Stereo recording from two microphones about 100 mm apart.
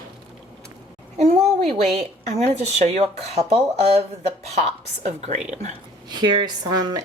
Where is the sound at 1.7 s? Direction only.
90° right.